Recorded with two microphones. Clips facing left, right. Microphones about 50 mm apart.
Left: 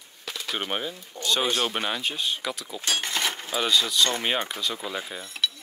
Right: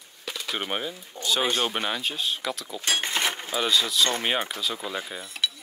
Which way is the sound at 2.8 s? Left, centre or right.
Right.